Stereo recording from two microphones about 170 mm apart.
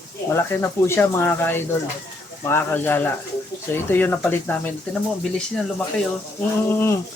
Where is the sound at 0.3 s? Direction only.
15° left (ahead or behind).